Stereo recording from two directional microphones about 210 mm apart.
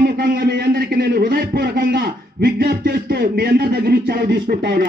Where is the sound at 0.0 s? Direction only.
50° right (ahead or behind).